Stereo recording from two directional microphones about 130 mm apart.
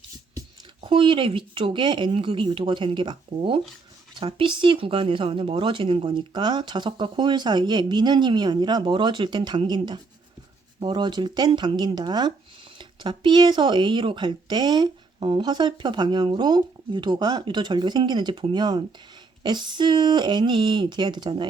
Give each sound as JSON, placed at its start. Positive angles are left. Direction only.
{"t": 0.9, "sound": "speech", "side_deg": -40}